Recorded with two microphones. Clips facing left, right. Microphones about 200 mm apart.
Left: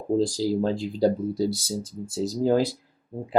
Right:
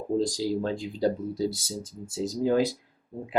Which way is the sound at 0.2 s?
35° left (ahead or behind).